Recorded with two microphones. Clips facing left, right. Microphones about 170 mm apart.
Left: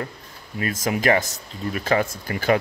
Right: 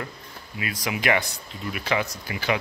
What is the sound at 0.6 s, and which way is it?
Speech, 45° left (ahead or behind).